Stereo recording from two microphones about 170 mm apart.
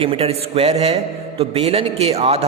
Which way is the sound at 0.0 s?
35° right (ahead or behind).